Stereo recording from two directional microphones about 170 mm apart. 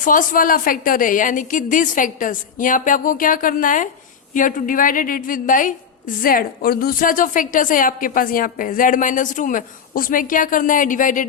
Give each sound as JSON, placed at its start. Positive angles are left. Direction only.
{"t": 0.0, "sound": "a woman's voice", "side_deg": 50}